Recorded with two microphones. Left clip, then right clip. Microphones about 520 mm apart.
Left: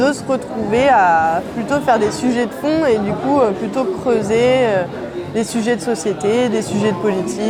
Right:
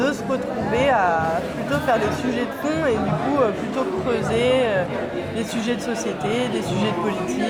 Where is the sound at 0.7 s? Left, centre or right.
Left.